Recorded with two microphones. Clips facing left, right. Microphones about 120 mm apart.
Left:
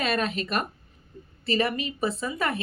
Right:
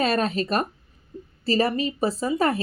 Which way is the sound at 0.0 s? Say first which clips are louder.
Right 4 dB; 35° right (ahead or behind).